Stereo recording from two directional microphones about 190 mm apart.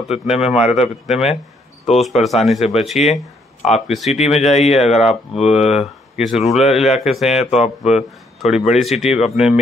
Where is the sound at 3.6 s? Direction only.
35° left (ahead or behind).